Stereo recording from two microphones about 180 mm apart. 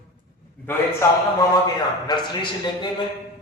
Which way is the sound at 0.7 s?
10° left (ahead or behind).